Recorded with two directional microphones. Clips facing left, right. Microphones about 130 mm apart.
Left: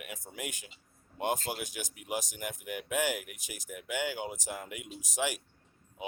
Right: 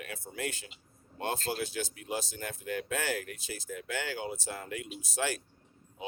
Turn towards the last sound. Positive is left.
turn(degrees=15)  # may be behind; listen again after turning